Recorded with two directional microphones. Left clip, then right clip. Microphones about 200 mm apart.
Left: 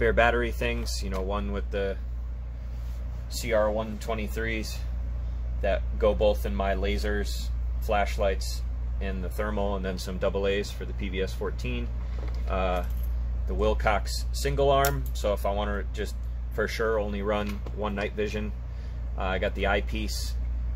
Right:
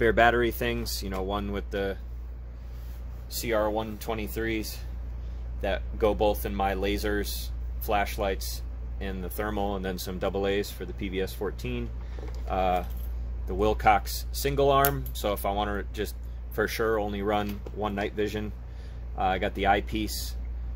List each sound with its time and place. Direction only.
0.0 s speech: 50° right (ahead or behind)
3.3 s speech: 50° right (ahead or behind)